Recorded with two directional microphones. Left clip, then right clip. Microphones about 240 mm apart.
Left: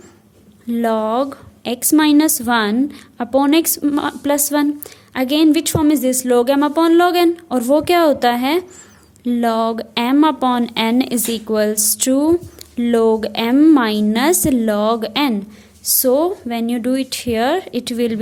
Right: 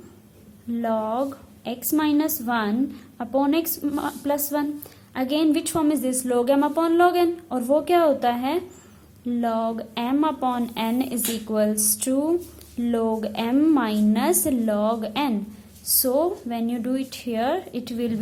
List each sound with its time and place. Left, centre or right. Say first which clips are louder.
0.7 s a woman's voice: left 7 dB; left